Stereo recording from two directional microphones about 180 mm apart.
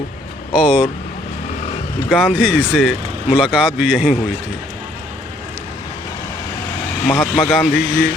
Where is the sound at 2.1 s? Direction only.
5° left (ahead or behind).